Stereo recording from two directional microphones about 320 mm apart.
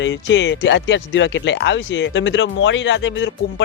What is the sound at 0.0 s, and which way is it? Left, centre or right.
Speech, left.